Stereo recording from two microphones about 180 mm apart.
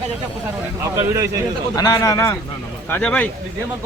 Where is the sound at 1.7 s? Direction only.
20° left (ahead or behind).